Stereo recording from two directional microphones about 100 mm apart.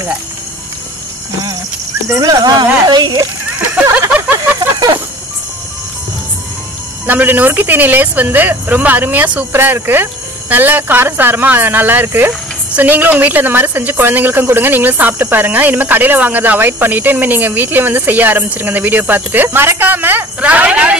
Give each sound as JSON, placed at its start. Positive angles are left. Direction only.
{"t": 2.0, "sound": "speech", "side_deg": -35}
{"t": 4.6, "sound": "a sound", "side_deg": -40}
{"t": 7.1, "sound": "a woman's voice", "side_deg": -20}